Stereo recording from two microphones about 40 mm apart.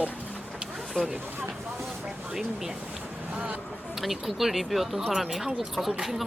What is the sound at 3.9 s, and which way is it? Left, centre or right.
Speech, centre.